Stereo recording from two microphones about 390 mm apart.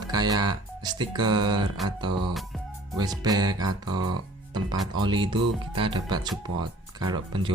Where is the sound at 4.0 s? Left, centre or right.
Right.